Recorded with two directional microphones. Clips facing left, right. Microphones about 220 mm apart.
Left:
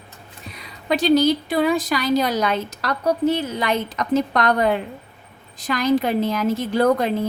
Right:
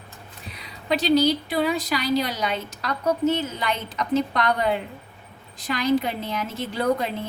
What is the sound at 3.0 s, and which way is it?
Speech, 35° left (ahead or behind).